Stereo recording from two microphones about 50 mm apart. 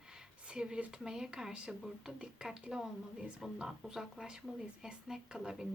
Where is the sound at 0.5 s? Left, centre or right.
Centre.